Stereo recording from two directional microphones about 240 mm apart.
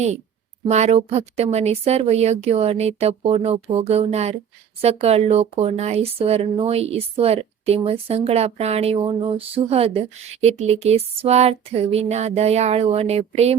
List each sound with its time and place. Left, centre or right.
0.6 s speech: right